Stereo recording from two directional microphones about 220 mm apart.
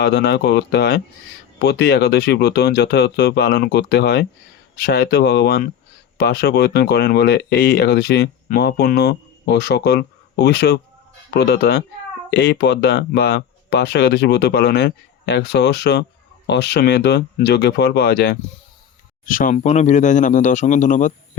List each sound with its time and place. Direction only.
0.0 s speech: 50° left (ahead or behind)